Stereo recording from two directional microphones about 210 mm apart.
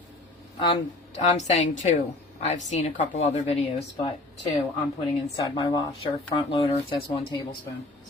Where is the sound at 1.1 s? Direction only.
35° left (ahead or behind).